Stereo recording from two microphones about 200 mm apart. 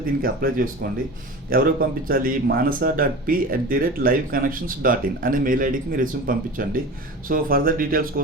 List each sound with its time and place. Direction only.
0.0 s speech: 45° right (ahead or behind)